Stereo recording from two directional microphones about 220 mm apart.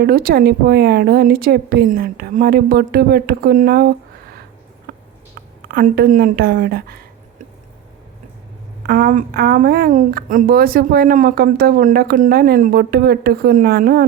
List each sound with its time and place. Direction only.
0.0 s a woman's voice: 45° right (ahead or behind)
4.9 s a sound: 45° right (ahead or behind)
5.6 s a woman's voice: 40° right (ahead or behind)
8.9 s a woman's voice: 40° right (ahead or behind)